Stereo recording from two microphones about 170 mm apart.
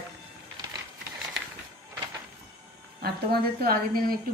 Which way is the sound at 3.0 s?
65° right (ahead or behind).